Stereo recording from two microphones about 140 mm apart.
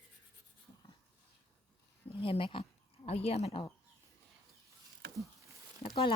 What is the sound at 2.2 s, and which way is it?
Speech, 40° left (ahead or behind).